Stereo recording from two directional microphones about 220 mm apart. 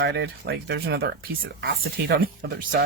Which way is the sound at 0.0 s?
50° right (ahead or behind).